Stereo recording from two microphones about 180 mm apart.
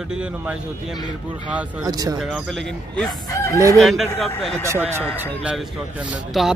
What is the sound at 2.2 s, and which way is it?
Speech, centre (ahead or behind).